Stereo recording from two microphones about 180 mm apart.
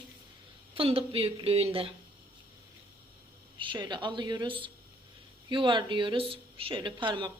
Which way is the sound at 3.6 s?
25° right (ahead or behind).